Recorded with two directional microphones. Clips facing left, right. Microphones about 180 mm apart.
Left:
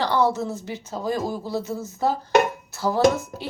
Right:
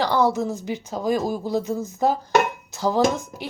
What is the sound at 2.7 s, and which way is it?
Dishes, 20° right (ahead or behind).